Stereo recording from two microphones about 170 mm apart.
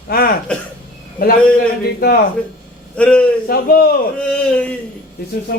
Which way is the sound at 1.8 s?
70° left (ahead or behind).